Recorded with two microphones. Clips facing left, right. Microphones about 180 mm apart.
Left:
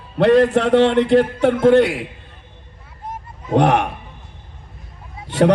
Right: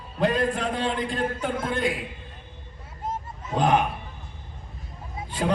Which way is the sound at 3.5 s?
80° left.